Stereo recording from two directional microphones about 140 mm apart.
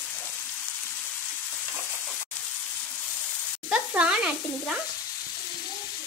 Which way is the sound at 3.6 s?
5° right (ahead or behind).